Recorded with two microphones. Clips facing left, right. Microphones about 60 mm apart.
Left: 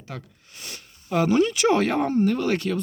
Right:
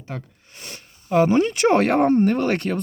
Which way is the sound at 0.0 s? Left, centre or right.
Right.